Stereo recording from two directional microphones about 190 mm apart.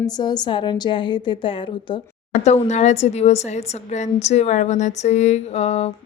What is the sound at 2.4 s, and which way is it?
Speech, 35° left (ahead or behind).